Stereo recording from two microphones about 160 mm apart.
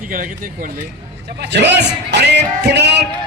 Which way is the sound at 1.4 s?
90° right.